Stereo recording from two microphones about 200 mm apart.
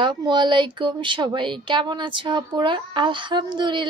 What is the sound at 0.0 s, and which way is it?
A woman's voice, 20° right (ahead or behind).